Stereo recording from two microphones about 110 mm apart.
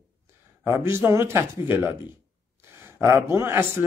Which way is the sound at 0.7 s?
25° right (ahead or behind).